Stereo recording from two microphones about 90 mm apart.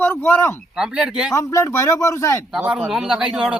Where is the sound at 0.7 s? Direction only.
5° right (ahead or behind).